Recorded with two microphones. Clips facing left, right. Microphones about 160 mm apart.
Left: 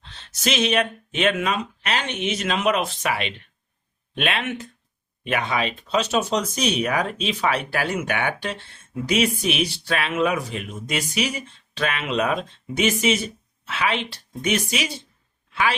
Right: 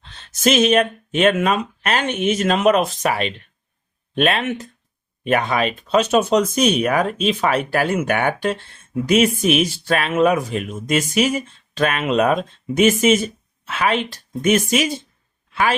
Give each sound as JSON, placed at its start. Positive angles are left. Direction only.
{"t": 0.4, "sound": "speech", "side_deg": -45}